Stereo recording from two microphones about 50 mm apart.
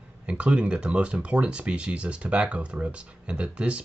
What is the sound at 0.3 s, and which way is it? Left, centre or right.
Speech, right.